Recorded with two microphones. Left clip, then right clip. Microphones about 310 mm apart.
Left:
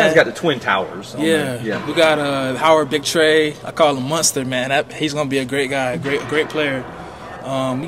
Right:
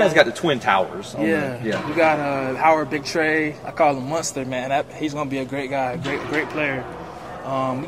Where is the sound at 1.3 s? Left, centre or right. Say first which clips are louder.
Left 5 dB; left.